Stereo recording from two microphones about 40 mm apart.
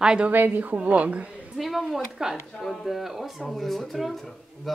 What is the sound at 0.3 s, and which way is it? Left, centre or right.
Speech, right.